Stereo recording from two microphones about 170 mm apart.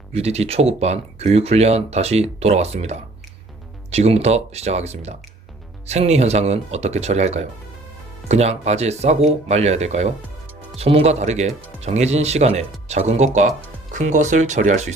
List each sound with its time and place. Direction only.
0.1 s speech: 40° right (ahead or behind)